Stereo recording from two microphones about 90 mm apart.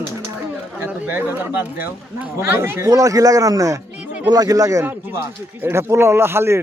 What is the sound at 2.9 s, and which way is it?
A man's voice, 40° right (ahead or behind).